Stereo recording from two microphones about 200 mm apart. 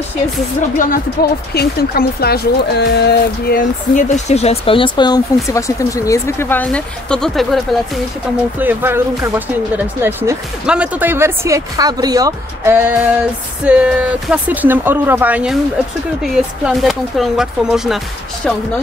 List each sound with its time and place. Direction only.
0.6 s speech: 40° left (ahead or behind); by 7.6 s centre (ahead or behind)
8.5 s speech: 10° right (ahead or behind)